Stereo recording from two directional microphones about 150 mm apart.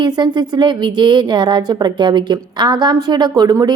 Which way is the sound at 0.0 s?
30° right (ahead or behind).